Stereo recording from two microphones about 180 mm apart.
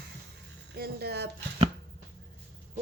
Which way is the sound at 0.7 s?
60° right (ahead or behind).